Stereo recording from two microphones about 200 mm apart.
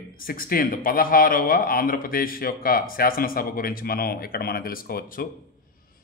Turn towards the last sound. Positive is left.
turn(degrees=45)  # may be behind; listen again after turning